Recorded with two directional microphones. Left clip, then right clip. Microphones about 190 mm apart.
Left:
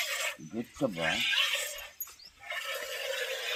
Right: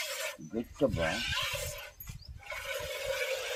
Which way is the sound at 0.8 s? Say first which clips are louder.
Even; 25° right (ahead or behind).